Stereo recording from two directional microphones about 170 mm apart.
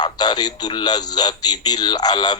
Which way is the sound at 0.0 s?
25° left (ahead or behind).